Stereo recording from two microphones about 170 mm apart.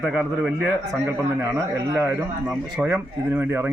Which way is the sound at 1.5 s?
15° right (ahead or behind).